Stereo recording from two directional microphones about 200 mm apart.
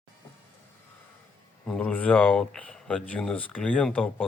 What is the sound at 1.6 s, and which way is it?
Speech, 5° left (ahead or behind).